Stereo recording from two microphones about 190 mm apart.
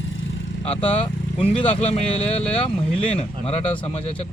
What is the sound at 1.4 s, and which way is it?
Speech, 30° left (ahead or behind).